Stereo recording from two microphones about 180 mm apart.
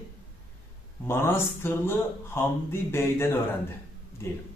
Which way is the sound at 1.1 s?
15° left (ahead or behind).